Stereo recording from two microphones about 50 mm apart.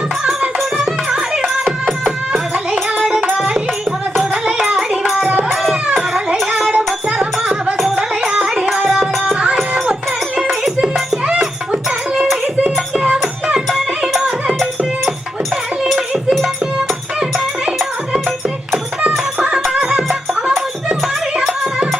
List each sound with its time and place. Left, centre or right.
0.3 s music: centre
4.6 s a sound: centre
6.7 s music: right
8.9 s music: centre
9.3 s music: right
11.7 s music: centre
13.7 s music: centre
15.8 s a sound: centre
19.4 s music: centre
21.4 s music: centre